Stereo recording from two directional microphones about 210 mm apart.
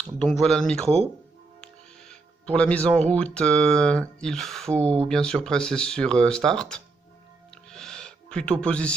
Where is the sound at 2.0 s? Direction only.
5° left (ahead or behind).